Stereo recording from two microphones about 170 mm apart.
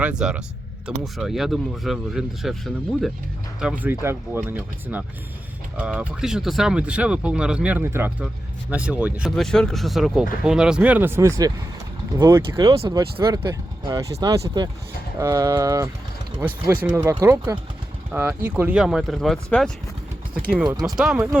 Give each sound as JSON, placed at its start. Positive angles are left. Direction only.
{"t": 0.0, "sound": "speech", "side_deg": -5}
{"t": 12.9, "sound": "speech", "side_deg": -20}
{"t": 20.8, "sound": "speech", "side_deg": -5}